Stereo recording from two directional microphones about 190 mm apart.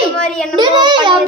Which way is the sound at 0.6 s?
25° right (ahead or behind).